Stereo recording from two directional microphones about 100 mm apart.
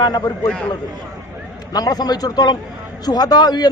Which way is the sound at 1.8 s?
40° left (ahead or behind).